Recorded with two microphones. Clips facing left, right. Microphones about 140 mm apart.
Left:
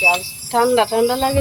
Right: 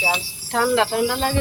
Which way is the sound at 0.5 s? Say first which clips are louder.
Left 5 dB; 30° left (ahead or behind).